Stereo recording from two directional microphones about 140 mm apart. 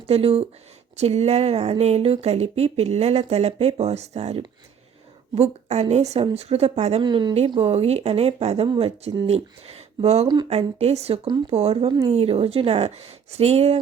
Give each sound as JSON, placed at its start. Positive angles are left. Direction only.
{"t": 0.1, "sound": "speech", "side_deg": -45}
{"t": 7.0, "sound": "speech", "side_deg": -35}
{"t": 8.6, "sound": "speech", "side_deg": -35}
{"t": 9.2, "sound": "speech", "side_deg": -45}